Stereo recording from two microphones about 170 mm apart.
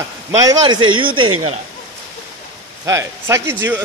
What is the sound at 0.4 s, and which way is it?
A man's voice, 25° right (ahead or behind).